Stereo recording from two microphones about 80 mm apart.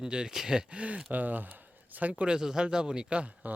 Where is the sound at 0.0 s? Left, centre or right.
Centre.